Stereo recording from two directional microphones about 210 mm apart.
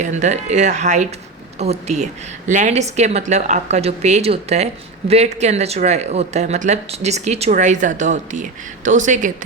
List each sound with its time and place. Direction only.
0.0 s a woman's voice: 35° right (ahead or behind)